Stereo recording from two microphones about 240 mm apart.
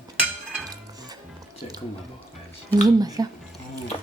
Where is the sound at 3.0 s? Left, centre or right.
Centre.